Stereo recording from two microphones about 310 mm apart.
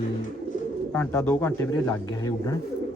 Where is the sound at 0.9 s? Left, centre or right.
Centre.